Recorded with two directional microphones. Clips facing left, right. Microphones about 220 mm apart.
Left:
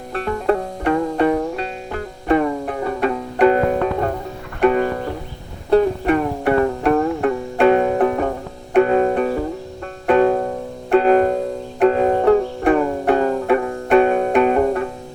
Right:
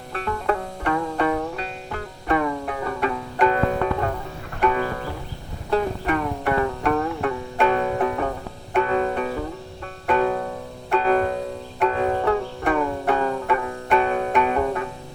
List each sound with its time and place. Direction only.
0.1 s music: 35° left (ahead or behind)
7.2 s music: 50° left (ahead or behind)
8.7 s music: 45° left (ahead or behind)
10.3 s music: 35° left (ahead or behind)
10.9 s music: 45° left (ahead or behind)